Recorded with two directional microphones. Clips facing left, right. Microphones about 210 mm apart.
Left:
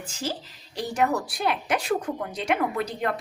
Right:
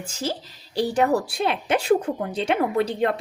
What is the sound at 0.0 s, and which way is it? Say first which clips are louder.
Speech: right 3 dB; 45° right (ahead or behind).